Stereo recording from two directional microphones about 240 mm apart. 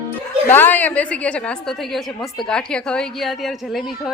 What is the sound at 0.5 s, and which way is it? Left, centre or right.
A woman's voice, centre.